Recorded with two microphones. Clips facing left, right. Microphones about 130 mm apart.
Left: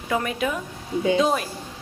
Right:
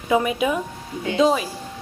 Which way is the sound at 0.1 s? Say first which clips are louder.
Right 5 dB; 10° right (ahead or behind).